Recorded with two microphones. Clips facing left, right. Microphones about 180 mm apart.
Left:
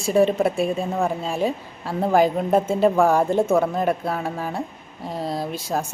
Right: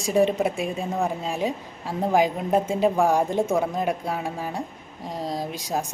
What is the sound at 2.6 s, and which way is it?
A woman's voice, 15° right (ahead or behind).